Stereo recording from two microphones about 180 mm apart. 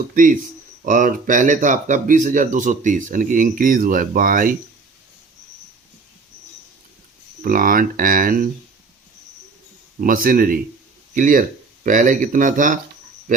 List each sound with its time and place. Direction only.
0.1 s speech: 50° right (ahead or behind)
7.4 s speech: 50° right (ahead or behind)
10.0 s speech: 50° right (ahead or behind)